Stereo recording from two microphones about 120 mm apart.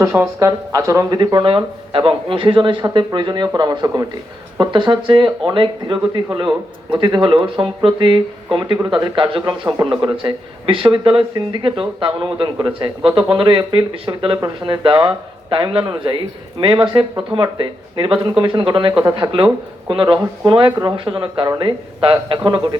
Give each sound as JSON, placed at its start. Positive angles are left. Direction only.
{"t": 0.0, "sound": "speech", "side_deg": -20}
{"t": 1.2, "sound": "speech", "side_deg": -40}
{"t": 9.4, "sound": "speech", "side_deg": -30}